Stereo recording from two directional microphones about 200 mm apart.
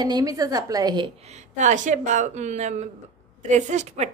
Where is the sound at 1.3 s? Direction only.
35° right (ahead or behind).